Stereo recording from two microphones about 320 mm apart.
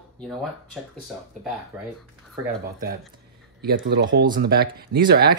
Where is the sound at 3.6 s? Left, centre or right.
Right.